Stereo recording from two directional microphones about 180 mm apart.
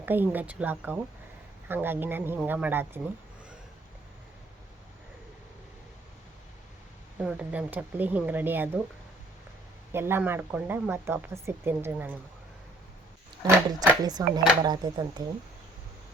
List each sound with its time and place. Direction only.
0.0 s speech: 10° right (ahead or behind)
7.2 s speech: 5° right (ahead or behind)
9.9 s speech: 15° right (ahead or behind)
13.4 s a sound: 20° right (ahead or behind)
14.0 s speech: 20° right (ahead or behind)